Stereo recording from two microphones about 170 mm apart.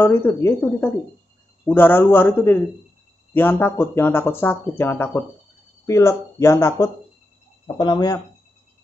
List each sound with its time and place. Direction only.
0.0 s speech: 15° left (ahead or behind)